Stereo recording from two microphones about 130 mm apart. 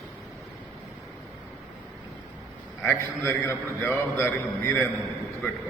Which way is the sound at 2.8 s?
15° left (ahead or behind).